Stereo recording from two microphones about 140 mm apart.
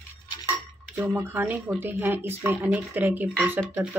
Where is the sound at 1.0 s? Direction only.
15° right (ahead or behind).